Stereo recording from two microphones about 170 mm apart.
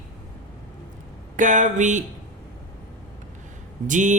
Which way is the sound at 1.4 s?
45° right (ahead or behind).